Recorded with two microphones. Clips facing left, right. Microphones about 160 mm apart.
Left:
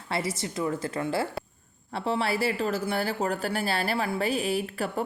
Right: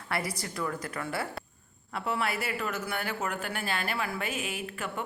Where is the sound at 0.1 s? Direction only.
25° left (ahead or behind).